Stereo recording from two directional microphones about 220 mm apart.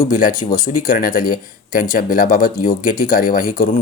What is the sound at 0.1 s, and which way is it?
Speech, 40° left (ahead or behind).